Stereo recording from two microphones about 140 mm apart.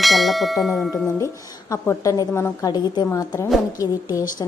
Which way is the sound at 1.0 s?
20° left (ahead or behind).